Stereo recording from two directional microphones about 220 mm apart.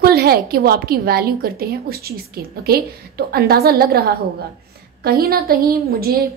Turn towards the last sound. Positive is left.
turn(degrees=-40)  # may be behind; listen again after turning